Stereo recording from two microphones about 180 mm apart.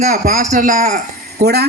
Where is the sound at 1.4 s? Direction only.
65° right (ahead or behind).